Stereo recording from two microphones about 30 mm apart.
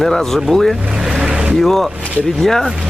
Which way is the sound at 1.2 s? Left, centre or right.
Right.